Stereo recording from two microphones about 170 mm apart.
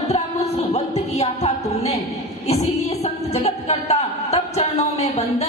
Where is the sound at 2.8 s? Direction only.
40° left (ahead or behind).